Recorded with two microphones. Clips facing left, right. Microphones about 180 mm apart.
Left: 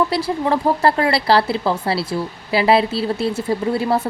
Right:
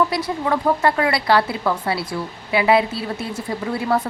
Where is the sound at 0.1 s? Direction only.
30° left (ahead or behind).